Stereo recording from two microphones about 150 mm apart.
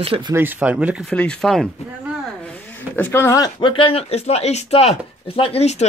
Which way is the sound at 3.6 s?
35° left (ahead or behind).